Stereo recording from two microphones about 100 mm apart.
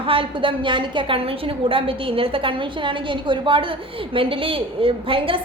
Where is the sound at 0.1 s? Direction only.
60° right (ahead or behind).